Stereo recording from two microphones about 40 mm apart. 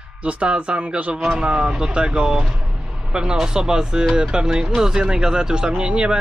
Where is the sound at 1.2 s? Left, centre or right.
Right.